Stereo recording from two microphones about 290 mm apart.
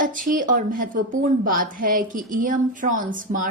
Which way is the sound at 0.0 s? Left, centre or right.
Right.